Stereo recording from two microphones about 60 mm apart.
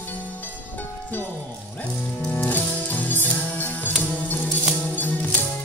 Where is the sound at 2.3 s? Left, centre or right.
Left.